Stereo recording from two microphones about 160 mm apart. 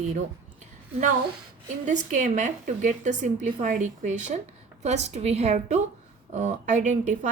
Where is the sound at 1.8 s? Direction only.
50° right (ahead or behind).